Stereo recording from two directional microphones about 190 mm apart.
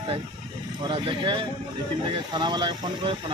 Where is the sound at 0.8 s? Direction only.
25° right (ahead or behind).